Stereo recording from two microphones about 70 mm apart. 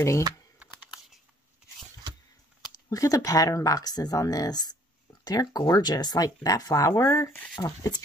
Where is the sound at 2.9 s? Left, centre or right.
Left.